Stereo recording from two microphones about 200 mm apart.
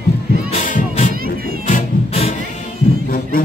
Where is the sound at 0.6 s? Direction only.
40° left (ahead or behind).